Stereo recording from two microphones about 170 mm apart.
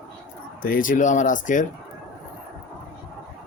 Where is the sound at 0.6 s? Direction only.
55° left (ahead or behind).